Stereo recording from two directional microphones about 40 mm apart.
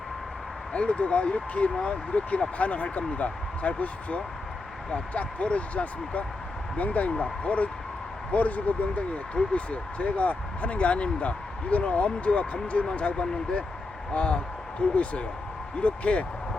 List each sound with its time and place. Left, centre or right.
0.7 s speech: left